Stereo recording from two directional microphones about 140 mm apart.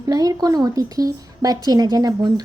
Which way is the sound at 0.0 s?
25° right (ahead or behind).